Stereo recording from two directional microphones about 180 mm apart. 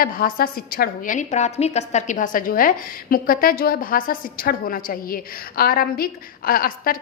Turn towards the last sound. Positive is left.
turn(degrees=55)  # may be behind; listen again after turning